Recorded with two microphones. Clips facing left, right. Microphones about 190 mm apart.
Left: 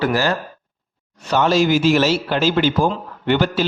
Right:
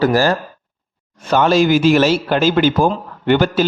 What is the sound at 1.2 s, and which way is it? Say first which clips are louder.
A man's voice: right 3 dB; 50° right (ahead or behind).